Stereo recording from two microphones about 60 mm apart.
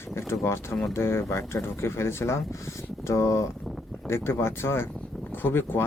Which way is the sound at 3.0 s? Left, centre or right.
Left.